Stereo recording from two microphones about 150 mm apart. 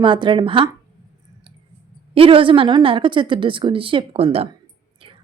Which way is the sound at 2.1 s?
35° right (ahead or behind).